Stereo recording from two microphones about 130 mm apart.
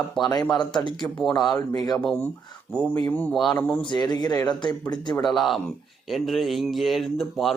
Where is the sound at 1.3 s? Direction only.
30° left (ahead or behind).